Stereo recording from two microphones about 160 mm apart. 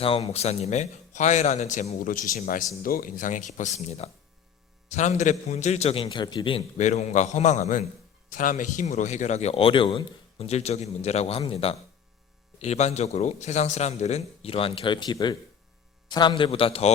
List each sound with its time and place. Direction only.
0.0 s a man's voice: 40° left (ahead or behind)
6.7 s a man's voice: 45° left (ahead or behind)